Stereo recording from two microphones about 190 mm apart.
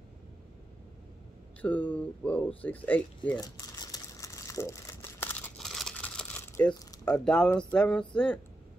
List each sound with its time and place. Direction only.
1.6 s speech: 10° left (ahead or behind)
3.3 s crumpling: 20° left (ahead or behind)
7.1 s speech: 5° left (ahead or behind)